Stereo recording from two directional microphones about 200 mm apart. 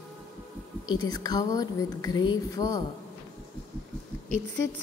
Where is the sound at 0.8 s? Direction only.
20° left (ahead or behind).